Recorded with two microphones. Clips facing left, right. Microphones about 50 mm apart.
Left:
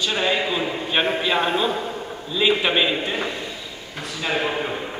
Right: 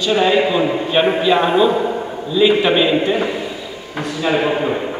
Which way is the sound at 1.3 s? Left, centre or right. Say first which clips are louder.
Right 8 dB; centre.